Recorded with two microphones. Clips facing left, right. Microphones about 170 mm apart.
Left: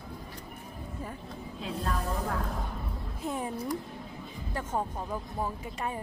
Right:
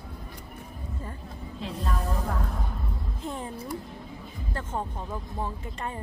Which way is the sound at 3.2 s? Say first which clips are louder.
Left 2 dB; 10° left (ahead or behind).